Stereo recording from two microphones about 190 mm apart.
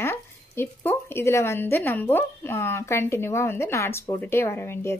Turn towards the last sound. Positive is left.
turn(degrees=15)  # may be behind; listen again after turning